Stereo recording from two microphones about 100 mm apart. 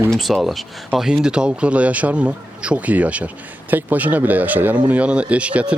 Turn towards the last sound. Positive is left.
turn(degrees=-10)  # may be behind; listen again after turning